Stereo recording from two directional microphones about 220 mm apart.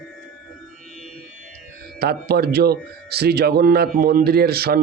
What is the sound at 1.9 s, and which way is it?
A man's voice, 45° right (ahead or behind).